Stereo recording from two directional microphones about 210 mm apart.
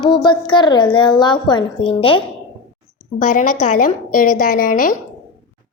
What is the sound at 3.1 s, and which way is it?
A woman's voice, 40° left (ahead or behind).